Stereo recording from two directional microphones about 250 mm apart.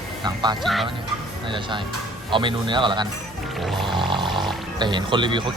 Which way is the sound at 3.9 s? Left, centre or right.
Centre.